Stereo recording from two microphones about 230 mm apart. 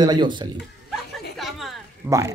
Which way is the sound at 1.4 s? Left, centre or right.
Centre.